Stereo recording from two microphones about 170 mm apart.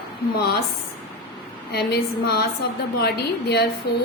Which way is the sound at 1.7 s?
70° left (ahead or behind).